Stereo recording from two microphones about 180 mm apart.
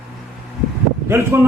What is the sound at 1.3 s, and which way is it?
Speech, 10° right (ahead or behind).